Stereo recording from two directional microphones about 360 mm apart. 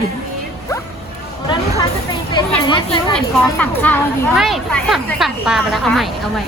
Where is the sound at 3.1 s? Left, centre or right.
Centre.